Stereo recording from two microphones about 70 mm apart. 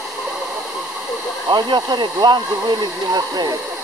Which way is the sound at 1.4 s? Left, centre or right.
Right.